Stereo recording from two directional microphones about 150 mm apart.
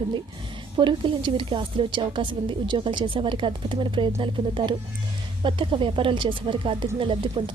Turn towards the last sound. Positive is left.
turn(degrees=-35)  # may be behind; listen again after turning